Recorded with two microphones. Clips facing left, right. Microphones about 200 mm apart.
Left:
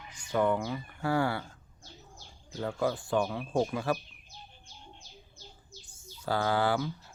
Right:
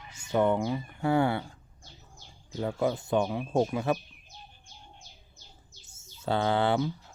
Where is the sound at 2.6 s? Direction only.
20° right (ahead or behind).